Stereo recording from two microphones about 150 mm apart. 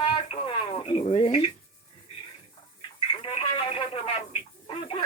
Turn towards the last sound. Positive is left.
turn(degrees=40)  # may be behind; listen again after turning